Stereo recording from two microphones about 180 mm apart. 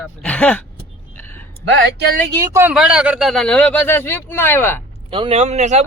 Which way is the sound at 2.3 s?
15° right (ahead or behind).